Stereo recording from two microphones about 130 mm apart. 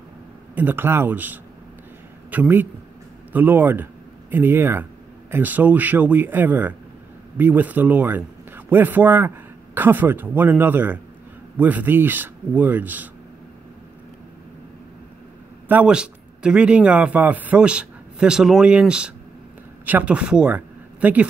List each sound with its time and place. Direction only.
0.6 s a man's voice: 15° right (ahead or behind)
15.7 s a man's voice: 10° right (ahead or behind)